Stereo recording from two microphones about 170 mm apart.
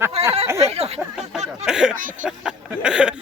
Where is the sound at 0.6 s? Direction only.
40° right (ahead or behind).